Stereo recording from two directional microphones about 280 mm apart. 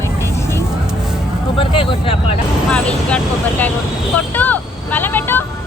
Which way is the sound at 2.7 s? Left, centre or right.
Centre.